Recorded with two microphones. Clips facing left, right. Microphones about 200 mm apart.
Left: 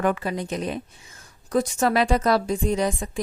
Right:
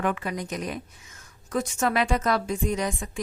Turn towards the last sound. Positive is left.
turn(degrees=30)  # may be behind; listen again after turning